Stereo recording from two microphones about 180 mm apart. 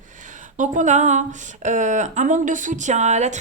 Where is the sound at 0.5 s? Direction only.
45° right (ahead or behind).